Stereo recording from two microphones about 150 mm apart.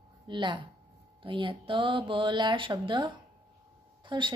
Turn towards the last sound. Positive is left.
turn(degrees=-30)  # may be behind; listen again after turning